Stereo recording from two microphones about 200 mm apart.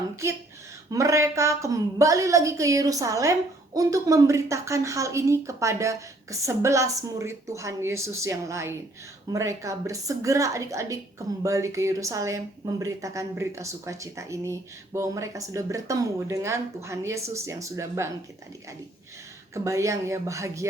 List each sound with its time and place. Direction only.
0.9 s speech: 15° right (ahead or behind)
19.5 s speech: 15° right (ahead or behind)